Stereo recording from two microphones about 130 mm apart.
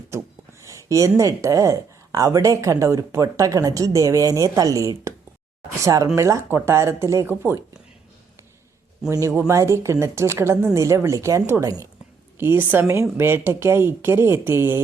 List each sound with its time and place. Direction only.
0.7 s speech: 25° right (ahead or behind)
9.0 s speech: 20° right (ahead or behind)